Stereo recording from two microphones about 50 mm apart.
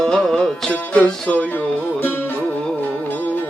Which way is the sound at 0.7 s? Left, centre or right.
Left.